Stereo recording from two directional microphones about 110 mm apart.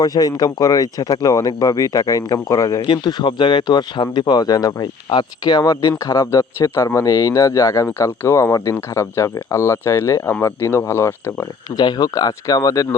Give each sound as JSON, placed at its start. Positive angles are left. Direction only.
{"t": 0.0, "sound": "speech", "side_deg": 35}
{"t": 2.8, "sound": "speech", "side_deg": 45}
{"t": 11.7, "sound": "speech", "side_deg": 40}